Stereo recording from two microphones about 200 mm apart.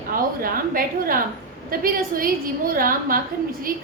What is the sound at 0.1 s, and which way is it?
A woman's voice, 45° right (ahead or behind).